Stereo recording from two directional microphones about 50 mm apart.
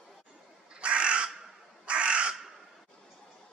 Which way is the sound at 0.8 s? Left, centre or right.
Right.